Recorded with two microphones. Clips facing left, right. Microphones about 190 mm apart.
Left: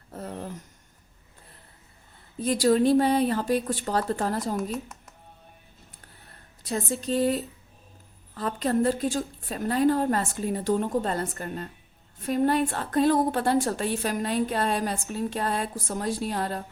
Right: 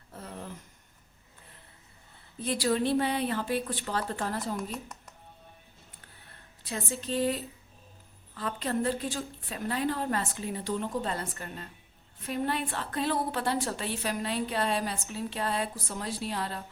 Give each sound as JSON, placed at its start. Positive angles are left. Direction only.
{"t": 0.1, "sound": "a sound", "side_deg": 40}
{"t": 2.4, "sound": "a woman's voice", "side_deg": 45}
{"t": 6.7, "sound": "a woman's voice", "side_deg": 40}